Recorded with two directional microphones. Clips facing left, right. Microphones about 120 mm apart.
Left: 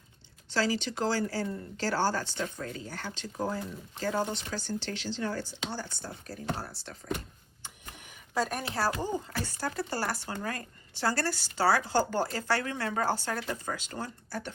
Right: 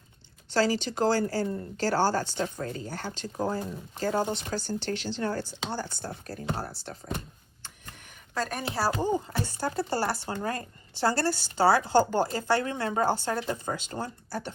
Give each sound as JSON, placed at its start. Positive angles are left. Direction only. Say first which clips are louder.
{"t": 0.5, "sound": "speech", "louder": "right 4 dB", "side_deg": -40}
{"t": 8.4, "sound": "a woman's voice", "louder": "left 1 dB", "side_deg": 5}
{"t": 8.9, "sound": "speech", "louder": "right 5 dB", "side_deg": -20}